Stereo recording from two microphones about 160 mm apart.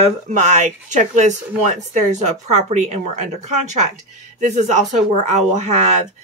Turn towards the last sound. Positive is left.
turn(degrees=-45)  # may be behind; listen again after turning